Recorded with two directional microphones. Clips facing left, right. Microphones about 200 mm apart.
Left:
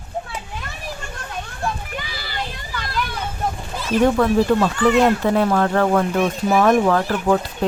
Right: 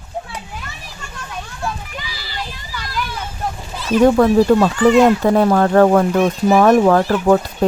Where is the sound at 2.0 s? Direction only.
55° left (ahead or behind).